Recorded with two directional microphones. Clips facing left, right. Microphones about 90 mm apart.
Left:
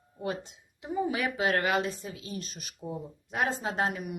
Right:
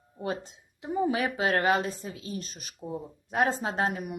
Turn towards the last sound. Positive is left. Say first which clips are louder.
# right 1 dB
turn(degrees=-40)  # may be behind; listen again after turning